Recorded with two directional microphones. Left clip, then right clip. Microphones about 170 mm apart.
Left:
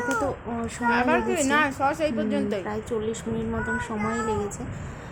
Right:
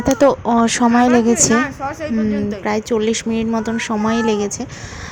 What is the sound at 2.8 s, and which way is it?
Speech, 40° right (ahead or behind).